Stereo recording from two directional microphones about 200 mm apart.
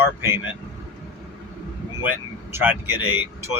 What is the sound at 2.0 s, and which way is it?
Speech, 10° right (ahead or behind).